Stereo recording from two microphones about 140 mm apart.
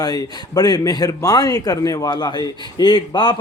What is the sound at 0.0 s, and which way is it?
A man's voice, 25° left (ahead or behind).